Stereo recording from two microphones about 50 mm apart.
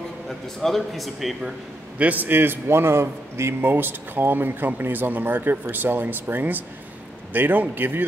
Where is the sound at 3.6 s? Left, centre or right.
Right.